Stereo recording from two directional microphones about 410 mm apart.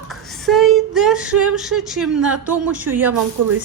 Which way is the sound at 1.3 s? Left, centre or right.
Right.